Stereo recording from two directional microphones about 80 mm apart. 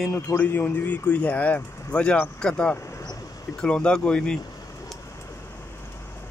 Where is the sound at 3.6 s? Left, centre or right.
Centre.